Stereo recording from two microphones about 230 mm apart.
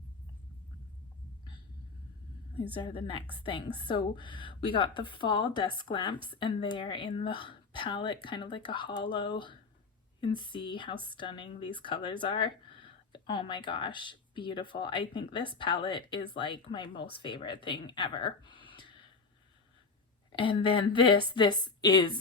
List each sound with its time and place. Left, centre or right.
2.8 s speech: left
20.3 s speech: left